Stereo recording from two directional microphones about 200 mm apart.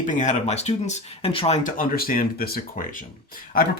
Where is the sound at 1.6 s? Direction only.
45° left (ahead or behind).